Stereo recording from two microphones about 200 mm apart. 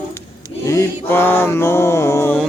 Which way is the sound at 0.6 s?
15° left (ahead or behind).